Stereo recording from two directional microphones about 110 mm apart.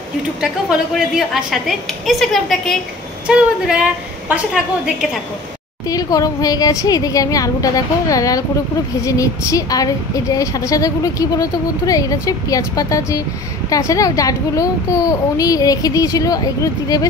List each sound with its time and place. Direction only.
0.4 s a woman's voice: 5° right (ahead or behind)
3.3 s a woman's voice: 10° right (ahead or behind)
5.9 s a woman's voice: 35° left (ahead or behind)